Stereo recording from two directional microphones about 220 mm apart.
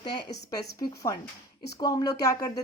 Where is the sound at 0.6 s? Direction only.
15° left (ahead or behind).